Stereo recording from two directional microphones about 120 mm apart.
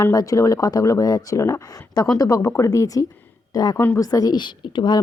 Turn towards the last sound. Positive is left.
turn(degrees=40)  # may be behind; listen again after turning